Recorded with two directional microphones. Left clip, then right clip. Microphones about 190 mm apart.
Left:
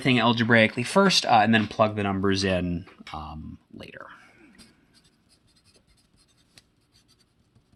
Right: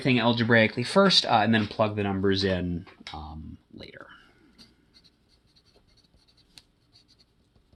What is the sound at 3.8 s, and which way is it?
Whispering, 35° left (ahead or behind).